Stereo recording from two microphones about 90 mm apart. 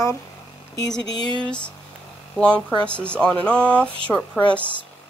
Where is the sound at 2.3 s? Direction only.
10° left (ahead or behind).